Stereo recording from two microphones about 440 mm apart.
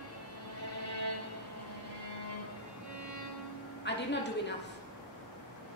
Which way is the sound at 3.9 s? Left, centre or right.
Left.